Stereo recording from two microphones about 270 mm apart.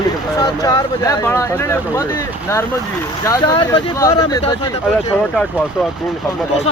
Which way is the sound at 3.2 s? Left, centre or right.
Centre.